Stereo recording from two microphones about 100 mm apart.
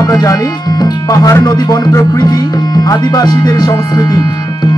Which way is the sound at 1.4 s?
40° left (ahead or behind).